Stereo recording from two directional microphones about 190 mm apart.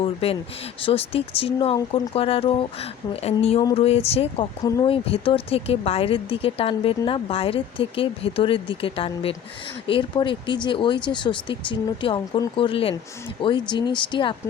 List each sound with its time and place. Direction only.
0.0 s speech: 30° left (ahead or behind)
3.6 s speech: 20° left (ahead or behind)
3.8 s speech: 30° left (ahead or behind)
4.6 s speech: 20° left (ahead or behind)
5.1 s speech: 30° left (ahead or behind)